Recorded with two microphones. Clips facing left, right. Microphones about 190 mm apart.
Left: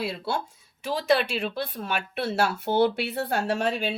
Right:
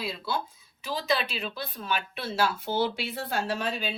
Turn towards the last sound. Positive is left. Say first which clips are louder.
# left 5 dB
turn(degrees=70)  # may be behind; listen again after turning